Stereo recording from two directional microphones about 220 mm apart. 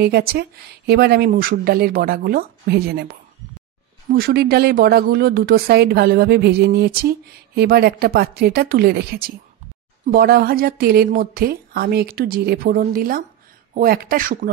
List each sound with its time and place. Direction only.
0.0 s speech: 45° right (ahead or behind)
4.1 s speech: 45° right (ahead or behind)